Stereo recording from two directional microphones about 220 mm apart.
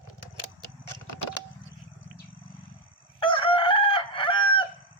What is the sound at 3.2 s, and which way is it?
Chicken, 25° left (ahead or behind).